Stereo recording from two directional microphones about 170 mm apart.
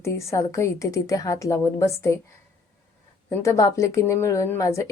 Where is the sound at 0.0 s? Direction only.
15° left (ahead or behind).